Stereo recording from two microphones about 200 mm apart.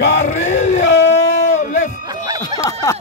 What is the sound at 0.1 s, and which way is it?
Music, 35° left (ahead or behind).